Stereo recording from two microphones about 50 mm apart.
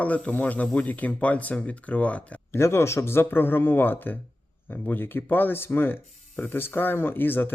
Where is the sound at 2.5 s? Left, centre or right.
Left.